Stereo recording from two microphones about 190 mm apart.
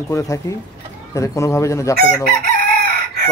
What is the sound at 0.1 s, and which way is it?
Speech, 15° left (ahead or behind).